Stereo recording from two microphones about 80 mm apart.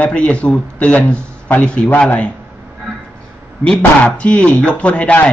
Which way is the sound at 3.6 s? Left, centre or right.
Centre.